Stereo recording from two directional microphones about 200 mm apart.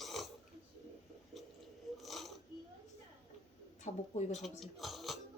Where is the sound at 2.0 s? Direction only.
Centre (ahead or behind).